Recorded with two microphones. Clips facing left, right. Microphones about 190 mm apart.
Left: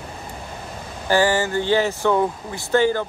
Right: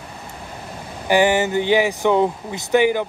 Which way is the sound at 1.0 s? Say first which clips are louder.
Right 2 dB; 15° right (ahead or behind).